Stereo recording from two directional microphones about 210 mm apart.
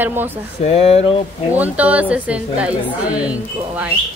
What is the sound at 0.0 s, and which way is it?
Speech, 10° right (ahead or behind).